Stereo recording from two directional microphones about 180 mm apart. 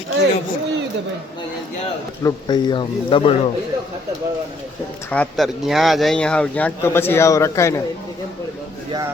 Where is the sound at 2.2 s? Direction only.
25° left (ahead or behind).